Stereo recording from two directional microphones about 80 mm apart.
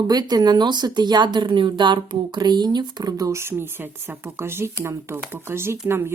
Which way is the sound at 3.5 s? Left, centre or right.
Right.